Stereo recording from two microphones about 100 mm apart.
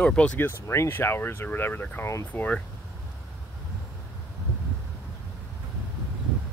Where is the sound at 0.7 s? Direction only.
25° left (ahead or behind).